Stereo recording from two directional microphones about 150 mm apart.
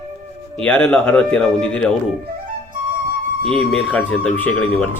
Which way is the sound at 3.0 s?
70° right (ahead or behind).